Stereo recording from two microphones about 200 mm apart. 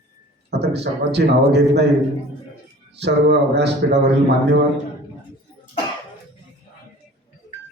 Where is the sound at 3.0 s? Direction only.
55° right (ahead or behind).